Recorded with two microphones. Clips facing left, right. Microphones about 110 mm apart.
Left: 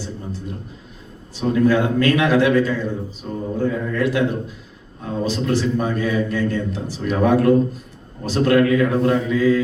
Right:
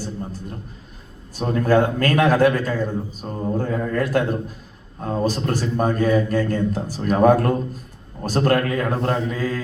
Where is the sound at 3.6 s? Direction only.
45° right (ahead or behind).